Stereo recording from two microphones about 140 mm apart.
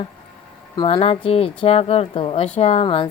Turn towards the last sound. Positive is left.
turn(degrees=40)  # may be behind; listen again after turning